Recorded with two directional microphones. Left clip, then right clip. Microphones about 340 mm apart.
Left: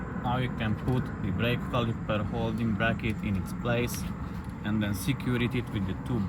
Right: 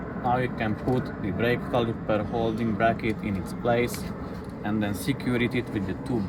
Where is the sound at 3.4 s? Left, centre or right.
Centre.